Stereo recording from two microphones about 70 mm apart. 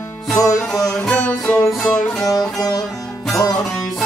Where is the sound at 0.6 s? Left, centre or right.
Centre.